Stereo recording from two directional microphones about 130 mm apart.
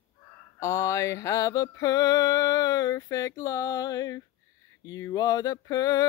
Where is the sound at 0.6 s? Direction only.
25° left (ahead or behind).